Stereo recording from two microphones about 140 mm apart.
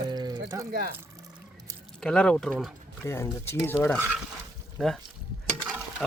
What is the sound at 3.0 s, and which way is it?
Speech, 20° left (ahead or behind).